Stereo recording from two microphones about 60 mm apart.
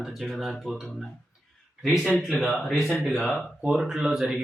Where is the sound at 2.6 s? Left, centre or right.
Centre.